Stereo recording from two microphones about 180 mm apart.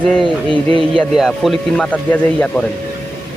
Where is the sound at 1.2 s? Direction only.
Centre (ahead or behind).